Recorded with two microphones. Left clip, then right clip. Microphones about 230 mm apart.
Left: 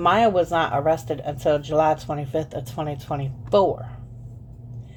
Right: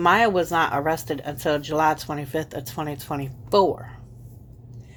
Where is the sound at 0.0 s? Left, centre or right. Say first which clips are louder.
Even; right.